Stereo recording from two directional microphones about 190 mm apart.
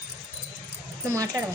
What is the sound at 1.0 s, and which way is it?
Speech, 15° right (ahead or behind).